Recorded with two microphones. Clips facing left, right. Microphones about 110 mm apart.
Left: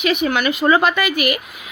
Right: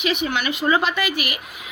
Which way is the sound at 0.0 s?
50° left (ahead or behind).